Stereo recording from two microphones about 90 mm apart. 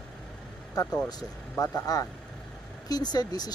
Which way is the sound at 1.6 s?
40° left (ahead or behind).